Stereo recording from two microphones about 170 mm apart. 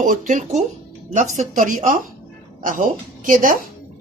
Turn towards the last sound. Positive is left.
turn(degrees=-50)  # may be behind; listen again after turning